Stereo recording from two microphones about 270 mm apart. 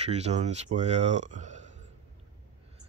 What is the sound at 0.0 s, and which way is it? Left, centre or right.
Speech, right.